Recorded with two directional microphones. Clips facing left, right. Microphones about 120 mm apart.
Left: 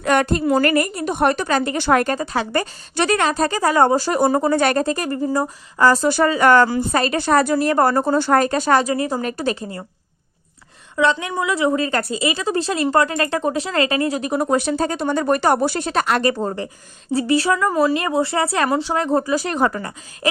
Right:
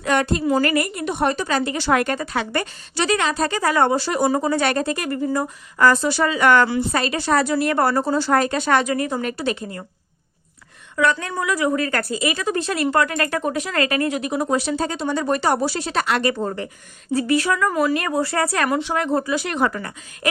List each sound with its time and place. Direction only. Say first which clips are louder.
0.0 s speech: left 2 dB; 50° left (ahead or behind)
1.2 s speech: left 3 dB; 60° left (ahead or behind); by 2.6 s 35° left (ahead or behind)
2.9 s a woman's voice: left 2 dB; 50° left (ahead or behind); by 6.1 s 30° left (ahead or behind)
6.1 s a woman's voice: left 3 dB; 45° left (ahead or behind)
10.9 s a woman's voice: left 2 dB; 20° left (ahead or behind); by 14.4 s 35° left (ahead or behind)
14.4 s speech: left 4 dB; 55° left (ahead or behind)
17.1 s a woman's voice: left 2 dB; 30° left (ahead or behind)